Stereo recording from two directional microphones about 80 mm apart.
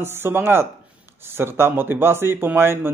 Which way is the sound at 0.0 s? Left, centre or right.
Right.